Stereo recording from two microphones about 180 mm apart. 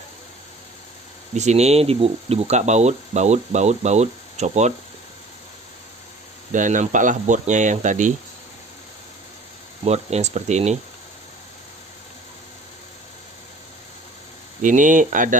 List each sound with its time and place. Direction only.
1.3 s speech: 40° right (ahead or behind)
6.5 s speech: 45° right (ahead or behind)
9.8 s speech: 35° right (ahead or behind)
14.6 s speech: 45° right (ahead or behind)